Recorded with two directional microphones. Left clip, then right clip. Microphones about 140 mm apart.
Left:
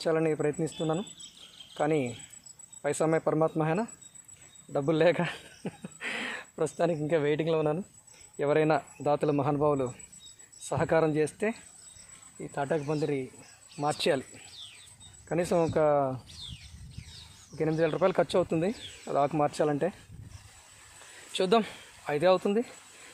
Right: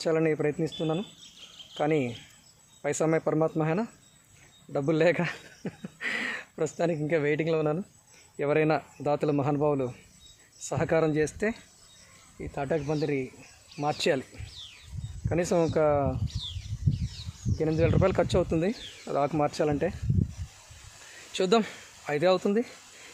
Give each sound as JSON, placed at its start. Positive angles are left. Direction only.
{"t": 0.0, "sound": "speech", "side_deg": -15}
{"t": 14.0, "sound": "speech", "side_deg": -10}
{"t": 17.6, "sound": "speech", "side_deg": -15}
{"t": 21.3, "sound": "speech", "side_deg": -15}